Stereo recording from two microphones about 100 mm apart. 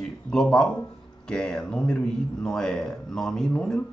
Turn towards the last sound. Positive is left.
turn(degrees=10)  # may be behind; listen again after turning